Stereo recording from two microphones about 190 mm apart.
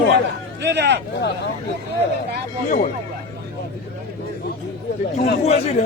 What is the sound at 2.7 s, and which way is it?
Speech, 40° left (ahead or behind).